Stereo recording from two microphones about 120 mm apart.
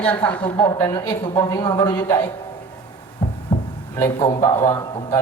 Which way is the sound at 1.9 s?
20° left (ahead or behind).